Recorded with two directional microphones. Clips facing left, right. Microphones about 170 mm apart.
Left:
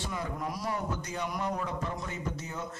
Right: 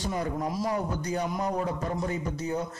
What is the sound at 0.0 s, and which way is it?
A man's voice, 40° right (ahead or behind).